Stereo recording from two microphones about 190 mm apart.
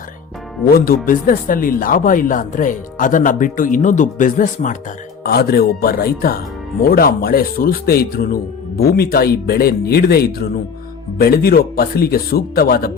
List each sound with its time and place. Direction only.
1.0 s speech: 45° left (ahead or behind)
5.2 s speech: 55° left (ahead or behind)